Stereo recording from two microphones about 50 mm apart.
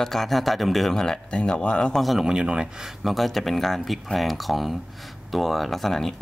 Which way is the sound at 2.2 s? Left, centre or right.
Centre.